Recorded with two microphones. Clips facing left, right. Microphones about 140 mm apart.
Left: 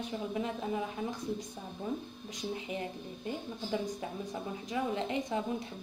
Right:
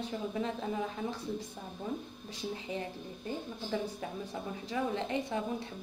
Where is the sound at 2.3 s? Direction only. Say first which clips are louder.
Even; 15° left (ahead or behind).